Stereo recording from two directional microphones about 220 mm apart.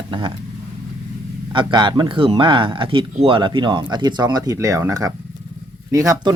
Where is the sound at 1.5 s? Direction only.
20° right (ahead or behind).